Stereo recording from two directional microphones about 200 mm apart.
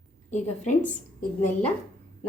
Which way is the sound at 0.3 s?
35° left (ahead or behind).